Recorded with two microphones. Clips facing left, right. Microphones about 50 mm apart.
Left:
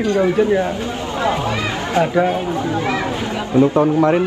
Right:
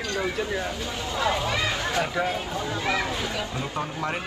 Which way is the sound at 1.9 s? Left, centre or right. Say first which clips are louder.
Left 14 dB; left.